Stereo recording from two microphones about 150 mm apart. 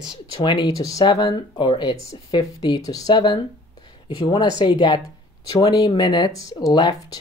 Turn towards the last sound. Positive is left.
turn(degrees=30)  # may be behind; listen again after turning